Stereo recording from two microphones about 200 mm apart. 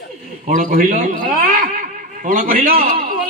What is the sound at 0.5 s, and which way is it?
Speech, 45° right (ahead or behind).